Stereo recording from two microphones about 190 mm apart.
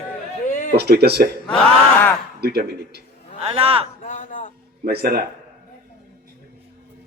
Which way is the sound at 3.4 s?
30° right (ahead or behind).